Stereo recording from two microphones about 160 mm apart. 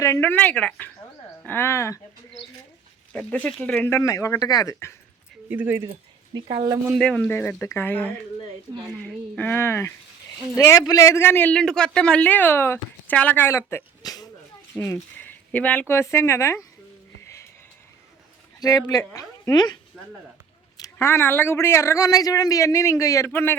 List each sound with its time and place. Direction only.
0.0 s a man's voice: 15° left (ahead or behind)
3.1 s a man's voice: 10° left (ahead or behind)
5.5 s speech: 10° right (ahead or behind)
5.9 s speech: 35° right (ahead or behind)
7.0 s a man's voice: 5° left (ahead or behind)
18.6 s a man's voice: 25° left (ahead or behind)